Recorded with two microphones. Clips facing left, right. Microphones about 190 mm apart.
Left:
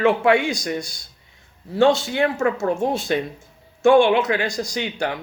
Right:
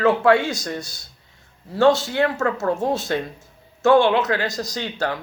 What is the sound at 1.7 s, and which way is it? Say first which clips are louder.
Speech: even; 25° left (ahead or behind).